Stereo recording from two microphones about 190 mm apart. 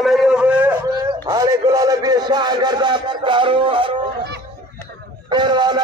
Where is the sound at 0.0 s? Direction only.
Centre (ahead or behind).